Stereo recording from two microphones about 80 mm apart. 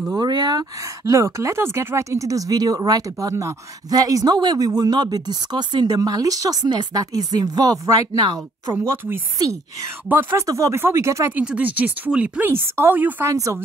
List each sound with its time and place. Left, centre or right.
0.1 s speech: right
1.0 s speech: right
5.9 s speech: right
8.8 s speech: right
10.3 s speech: right
11.3 s speech: centre
12.4 s speech: right
13.3 s speech: right